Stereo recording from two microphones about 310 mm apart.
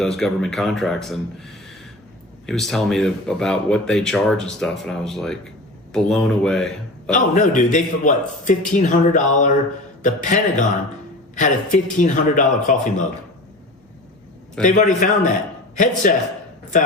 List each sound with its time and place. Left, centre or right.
0.0 s speech: centre
2.5 s speech: centre
7.1 s a man's voice: left
14.6 s a man's voice: left